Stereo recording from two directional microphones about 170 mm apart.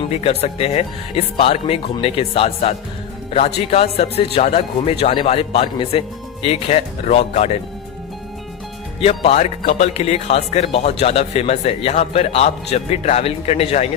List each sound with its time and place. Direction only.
0.1 s speech: 35° left (ahead or behind)
9.0 s speech: 35° left (ahead or behind)